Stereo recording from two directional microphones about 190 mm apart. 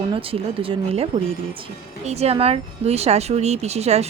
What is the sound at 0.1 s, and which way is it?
A woman's voice, 30° right (ahead or behind).